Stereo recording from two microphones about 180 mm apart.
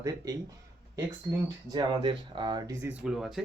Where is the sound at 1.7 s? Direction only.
25° right (ahead or behind); by 3.4 s centre (ahead or behind).